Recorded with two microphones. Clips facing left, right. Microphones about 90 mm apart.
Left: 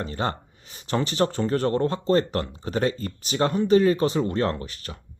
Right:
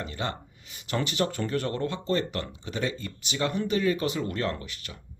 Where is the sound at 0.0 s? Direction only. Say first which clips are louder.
Left 5 dB; 35° left (ahead or behind).